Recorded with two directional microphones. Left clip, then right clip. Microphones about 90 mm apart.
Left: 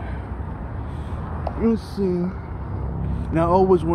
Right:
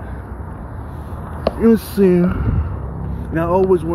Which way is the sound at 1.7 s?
90° right.